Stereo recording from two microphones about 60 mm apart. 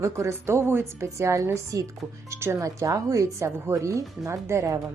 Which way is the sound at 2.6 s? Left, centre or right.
Right.